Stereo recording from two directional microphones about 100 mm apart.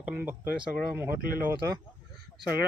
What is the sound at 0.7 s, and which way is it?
Speech, 10° right (ahead or behind).